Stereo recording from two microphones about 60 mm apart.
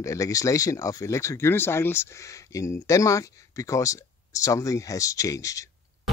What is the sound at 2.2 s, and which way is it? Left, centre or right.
Speech, left.